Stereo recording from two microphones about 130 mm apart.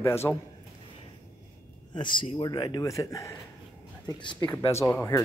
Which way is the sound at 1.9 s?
35° left (ahead or behind).